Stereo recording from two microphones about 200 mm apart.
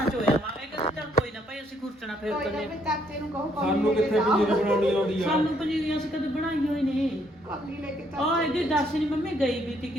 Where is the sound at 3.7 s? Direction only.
Centre (ahead or behind).